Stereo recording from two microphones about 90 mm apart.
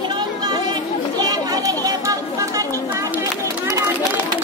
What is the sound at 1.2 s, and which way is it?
Chatter, 45° right (ahead or behind).